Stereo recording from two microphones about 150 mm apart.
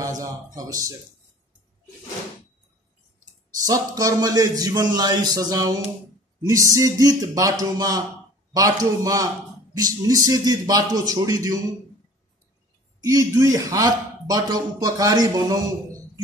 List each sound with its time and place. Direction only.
0.0 s a man's voice: 20° right (ahead or behind)
3.6 s a man's voice: 25° right (ahead or behind)
13.0 s a man's voice: 20° right (ahead or behind)